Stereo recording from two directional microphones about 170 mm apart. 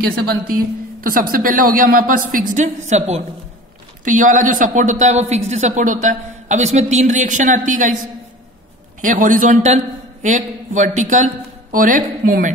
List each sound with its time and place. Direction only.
0.0 s a woman's voice: 65° right (ahead or behind); by 8.0 s 50° right (ahead or behind)
9.0 s a woman's voice: 50° right (ahead or behind)